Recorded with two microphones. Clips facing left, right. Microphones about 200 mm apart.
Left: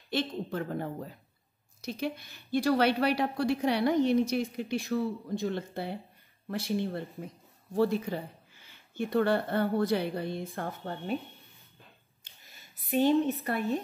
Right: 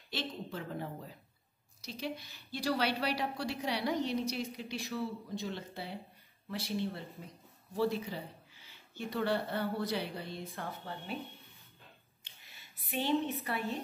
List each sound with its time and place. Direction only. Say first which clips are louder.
0.1 s a woman's voice: left 8 dB; 55° left (ahead or behind)
12.9 s a woman's voice: left 8 dB; 45° left (ahead or behind)